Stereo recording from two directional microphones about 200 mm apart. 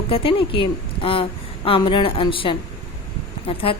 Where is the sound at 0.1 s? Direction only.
25° left (ahead or behind).